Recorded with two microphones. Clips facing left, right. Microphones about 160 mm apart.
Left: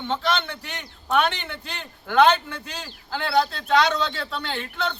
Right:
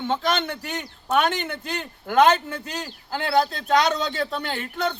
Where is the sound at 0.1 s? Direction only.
45° right (ahead or behind).